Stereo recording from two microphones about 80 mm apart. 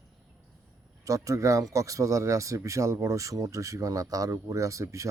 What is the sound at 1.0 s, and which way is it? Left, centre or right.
Speech, right.